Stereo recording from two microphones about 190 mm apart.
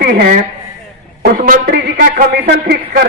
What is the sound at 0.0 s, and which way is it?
A woman's voice, 50° right (ahead or behind).